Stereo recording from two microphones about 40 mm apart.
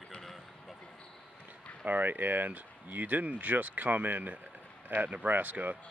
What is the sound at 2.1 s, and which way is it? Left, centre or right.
A man's voice, right.